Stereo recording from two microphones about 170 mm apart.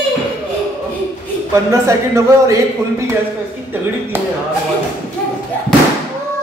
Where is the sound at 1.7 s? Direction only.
20° right (ahead or behind).